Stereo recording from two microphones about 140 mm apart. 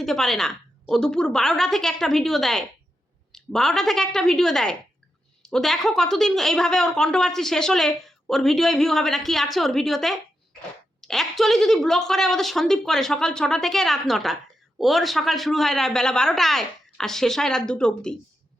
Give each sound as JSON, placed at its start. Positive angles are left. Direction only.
{"t": 0.0, "sound": "a woman's voice", "side_deg": 0}